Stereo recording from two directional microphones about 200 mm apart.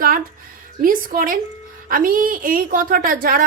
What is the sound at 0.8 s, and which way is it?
A woman's voice, 45° right (ahead or behind).